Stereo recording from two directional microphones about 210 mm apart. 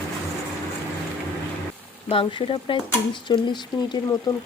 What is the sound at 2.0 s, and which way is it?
Speech, 25° left (ahead or behind).